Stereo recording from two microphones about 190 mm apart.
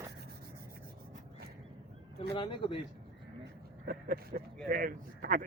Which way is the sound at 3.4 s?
50° right (ahead or behind).